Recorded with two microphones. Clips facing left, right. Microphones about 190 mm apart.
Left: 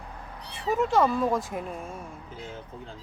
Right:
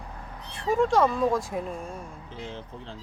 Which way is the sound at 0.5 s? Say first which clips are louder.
Right 1 dB; 5° left (ahead or behind).